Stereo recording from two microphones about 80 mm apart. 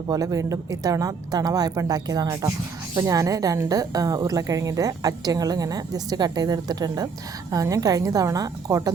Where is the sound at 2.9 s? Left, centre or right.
Right.